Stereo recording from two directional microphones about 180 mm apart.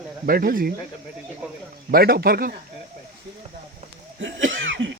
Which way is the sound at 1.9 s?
55° right (ahead or behind).